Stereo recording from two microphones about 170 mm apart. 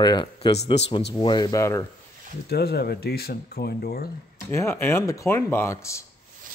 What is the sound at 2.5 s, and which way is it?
Speech, 70° left (ahead or behind).